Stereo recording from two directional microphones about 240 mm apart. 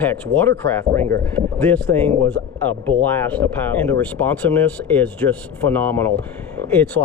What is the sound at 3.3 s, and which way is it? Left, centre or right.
Speech, centre.